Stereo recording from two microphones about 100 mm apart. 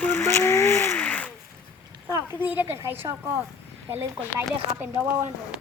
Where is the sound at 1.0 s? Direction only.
15° left (ahead or behind).